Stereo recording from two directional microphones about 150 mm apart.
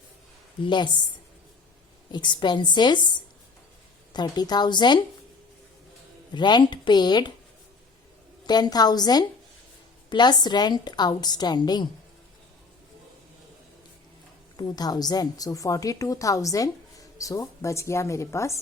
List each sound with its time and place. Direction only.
0.6 s a woman's voice: 30° left (ahead or behind)
2.1 s a woman's voice: 30° left (ahead or behind)
4.1 s a woman's voice: 30° left (ahead or behind)
6.3 s a woman's voice: 30° left (ahead or behind)
8.4 s a woman's voice: 25° left (ahead or behind)
14.5 s a woman's voice: 25° left (ahead or behind)